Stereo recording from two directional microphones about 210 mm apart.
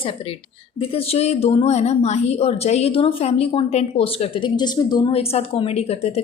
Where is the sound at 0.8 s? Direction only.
30° left (ahead or behind).